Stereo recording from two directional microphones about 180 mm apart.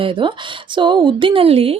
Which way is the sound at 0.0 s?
25° right (ahead or behind).